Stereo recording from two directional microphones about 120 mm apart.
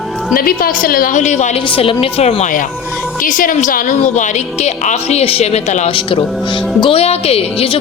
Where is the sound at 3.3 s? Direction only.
90° left; by 5.9 s 70° left (ahead or behind).